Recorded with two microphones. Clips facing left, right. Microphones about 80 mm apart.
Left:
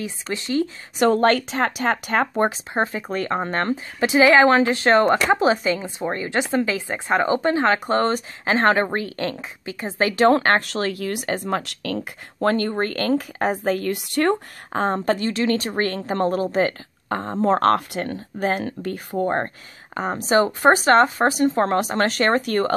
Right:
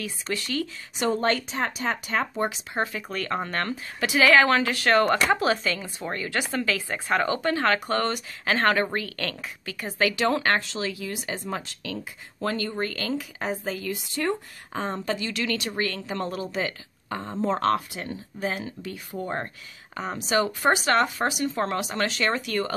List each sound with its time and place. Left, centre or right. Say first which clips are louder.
0.0 s speech: left 3 dB; left
0.9 s speech: left 7 dB; left
2.7 s speech: left 5 dB; left
10.7 s speech: left 6 dB; left
15.3 s speech: left 7 dB; left